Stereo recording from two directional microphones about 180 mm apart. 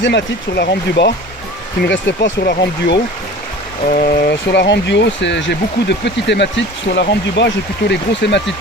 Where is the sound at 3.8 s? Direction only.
50° left (ahead or behind); by 8.4 s 75° left (ahead or behind).